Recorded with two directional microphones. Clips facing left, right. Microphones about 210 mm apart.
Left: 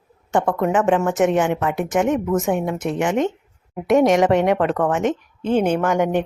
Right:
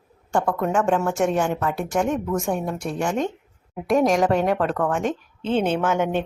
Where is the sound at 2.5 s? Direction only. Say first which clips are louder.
Left 4 dB; 20° left (ahead or behind).